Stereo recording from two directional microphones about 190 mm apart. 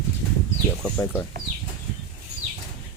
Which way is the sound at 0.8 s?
10° left (ahead or behind).